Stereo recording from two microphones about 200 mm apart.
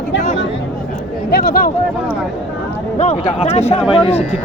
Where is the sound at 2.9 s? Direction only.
35° left (ahead or behind).